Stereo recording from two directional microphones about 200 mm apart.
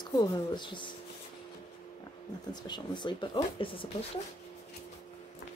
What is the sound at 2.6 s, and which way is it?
Speech, 20° left (ahead or behind).